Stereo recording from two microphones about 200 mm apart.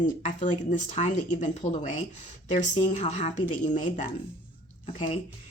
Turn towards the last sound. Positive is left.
turn(degrees=30)  # may be behind; listen again after turning